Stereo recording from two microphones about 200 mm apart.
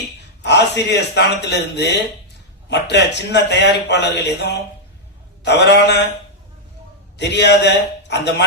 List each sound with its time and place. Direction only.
0.4 s a man's voice: 60° left (ahead or behind)
7.2 s a man's voice: 60° left (ahead or behind)